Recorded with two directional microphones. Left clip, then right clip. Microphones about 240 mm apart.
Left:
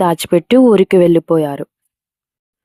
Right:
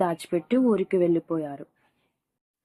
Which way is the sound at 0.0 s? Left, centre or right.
Left.